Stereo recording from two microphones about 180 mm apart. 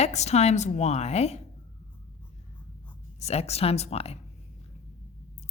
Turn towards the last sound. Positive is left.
turn(degrees=35)  # may be behind; listen again after turning